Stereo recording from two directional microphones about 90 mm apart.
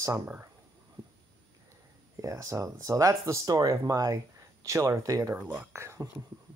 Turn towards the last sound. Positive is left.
turn(degrees=-30)  # may be behind; listen again after turning